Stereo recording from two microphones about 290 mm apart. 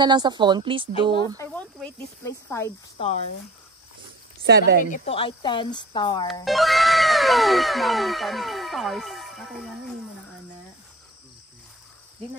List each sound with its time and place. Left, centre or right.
0.0 s speech: centre
1.4 s speech: centre
4.5 s speech: right
4.8 s speech: left
6.4 s cat: centre